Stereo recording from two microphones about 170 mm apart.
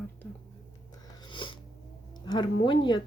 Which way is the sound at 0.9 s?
25° left (ahead or behind).